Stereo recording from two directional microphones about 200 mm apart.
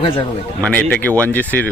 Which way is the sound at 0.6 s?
5° left (ahead or behind).